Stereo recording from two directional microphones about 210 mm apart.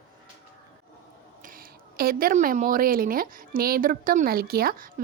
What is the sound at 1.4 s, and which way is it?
A woman's voice, 40° right (ahead or behind).